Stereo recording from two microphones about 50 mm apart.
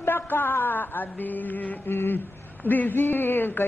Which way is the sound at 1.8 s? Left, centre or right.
Left.